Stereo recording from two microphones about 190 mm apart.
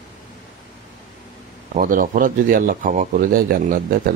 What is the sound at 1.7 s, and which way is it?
Speech, 45° right (ahead or behind).